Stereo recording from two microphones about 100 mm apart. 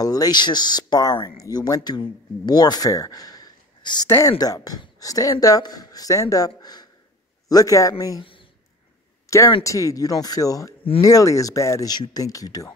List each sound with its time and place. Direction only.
0.0 s speech: 40° left (ahead or behind)
4.1 s speech: 25° left (ahead or behind)
4.4 s a man's voice: 40° left (ahead or behind)
8.2 s a sound: 60° left (ahead or behind)
9.6 s speech: 35° left (ahead or behind)